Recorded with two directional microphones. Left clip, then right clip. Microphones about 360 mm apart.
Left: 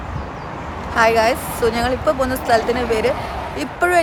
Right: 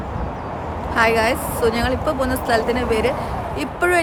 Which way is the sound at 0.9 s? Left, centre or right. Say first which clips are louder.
Left 2 dB; centre.